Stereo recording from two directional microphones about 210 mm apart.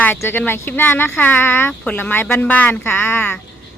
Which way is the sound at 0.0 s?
10° left (ahead or behind).